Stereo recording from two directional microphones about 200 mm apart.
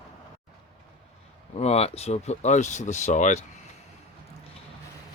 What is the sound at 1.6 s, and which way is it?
Speech, 30° left (ahead or behind).